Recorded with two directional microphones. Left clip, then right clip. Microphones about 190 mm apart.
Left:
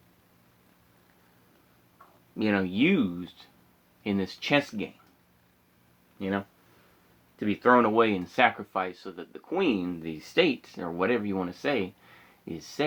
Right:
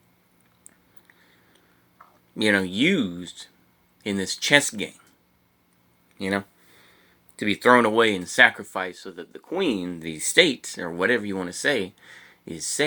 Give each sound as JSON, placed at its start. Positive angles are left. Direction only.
{"t": 2.3, "sound": "speech", "side_deg": -20}
{"t": 6.1, "sound": "speech", "side_deg": -30}